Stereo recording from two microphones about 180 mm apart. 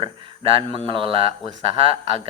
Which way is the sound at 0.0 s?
30° right (ahead or behind).